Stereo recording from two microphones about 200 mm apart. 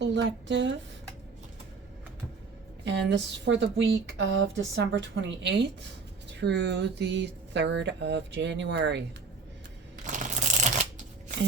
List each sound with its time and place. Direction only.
0.0 s speech: 65° right (ahead or behind)
2.8 s speech: 60° right (ahead or behind)
10.1 s shuffling cards: 40° right (ahead or behind)